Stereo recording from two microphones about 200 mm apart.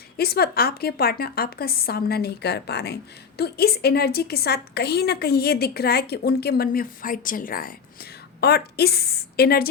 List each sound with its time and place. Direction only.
0.2 s a woman's voice: 50° left (ahead or behind)